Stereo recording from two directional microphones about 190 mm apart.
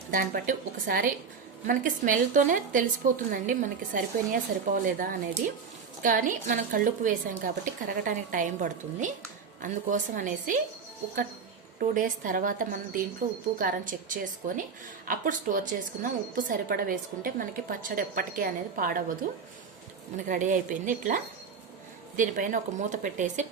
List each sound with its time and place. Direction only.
0.1 s a woman's voice: 45° right (ahead or behind)
11.8 s a woman's voice: 45° right (ahead or behind)
20.1 s a woman's voice: 45° right (ahead or behind)